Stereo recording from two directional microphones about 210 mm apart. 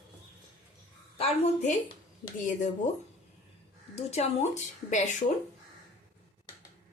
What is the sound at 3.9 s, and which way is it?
A woman's voice, 30° left (ahead or behind).